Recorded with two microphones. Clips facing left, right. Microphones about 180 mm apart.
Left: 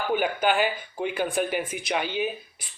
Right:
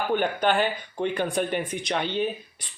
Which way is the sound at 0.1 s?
5° left (ahead or behind).